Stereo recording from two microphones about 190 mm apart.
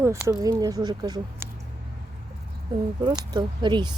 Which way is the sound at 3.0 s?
25° right (ahead or behind).